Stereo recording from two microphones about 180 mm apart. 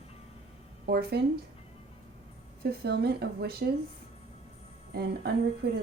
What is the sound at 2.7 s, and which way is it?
Speech, 65° right (ahead or behind).